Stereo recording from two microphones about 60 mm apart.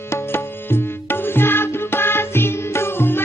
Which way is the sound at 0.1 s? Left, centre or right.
Left.